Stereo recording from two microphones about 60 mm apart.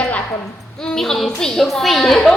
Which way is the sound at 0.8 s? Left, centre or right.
Centre.